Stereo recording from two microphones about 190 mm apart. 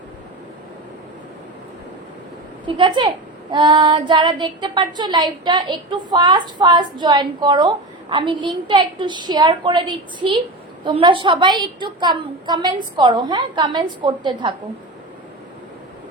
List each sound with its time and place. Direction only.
2.6 s child singing: 25° right (ahead or behind)